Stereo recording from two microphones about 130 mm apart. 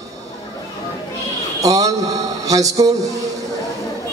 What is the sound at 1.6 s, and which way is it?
A man's voice, 25° right (ahead or behind).